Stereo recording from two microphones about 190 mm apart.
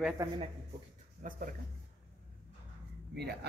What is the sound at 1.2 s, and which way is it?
Speech, 45° right (ahead or behind).